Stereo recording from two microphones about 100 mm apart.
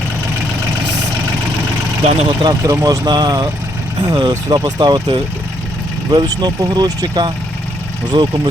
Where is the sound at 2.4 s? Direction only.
40° right (ahead or behind).